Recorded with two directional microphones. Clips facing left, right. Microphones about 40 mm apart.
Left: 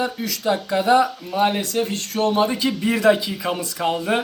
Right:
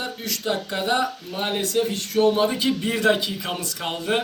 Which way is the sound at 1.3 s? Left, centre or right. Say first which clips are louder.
Left 5 dB; left.